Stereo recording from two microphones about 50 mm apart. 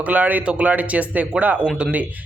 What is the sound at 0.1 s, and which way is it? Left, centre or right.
A man's voice, right.